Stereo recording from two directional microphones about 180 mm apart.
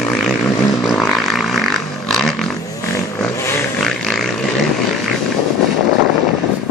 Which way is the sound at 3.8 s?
Centre (ahead or behind).